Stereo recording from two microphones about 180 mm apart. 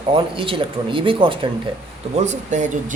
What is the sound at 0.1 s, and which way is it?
Speech, 30° right (ahead or behind).